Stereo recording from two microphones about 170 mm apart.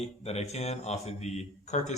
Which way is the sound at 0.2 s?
40° left (ahead or behind).